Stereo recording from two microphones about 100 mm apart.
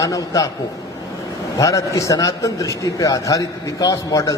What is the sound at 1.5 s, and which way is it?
A man's voice, 35° left (ahead or behind).